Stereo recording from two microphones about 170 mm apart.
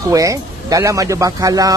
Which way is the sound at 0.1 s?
20° right (ahead or behind).